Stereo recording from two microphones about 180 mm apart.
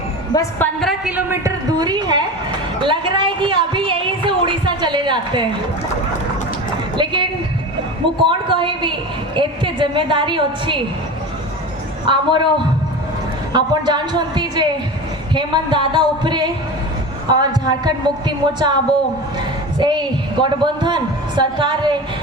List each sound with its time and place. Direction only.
0.3 s a woman's voice: 20° left (ahead or behind)
0.8 s a woman's voice: centre (ahead or behind); by 5.5 s 25° right (ahead or behind)
6.9 s a woman's voice: 25° right (ahead or behind)
12.0 s speech: 25° right (ahead or behind)
13.5 s speech: 25° right (ahead or behind)
19.8 s a sound: 25° right (ahead or behind)
20.4 s speech: 25° right (ahead or behind)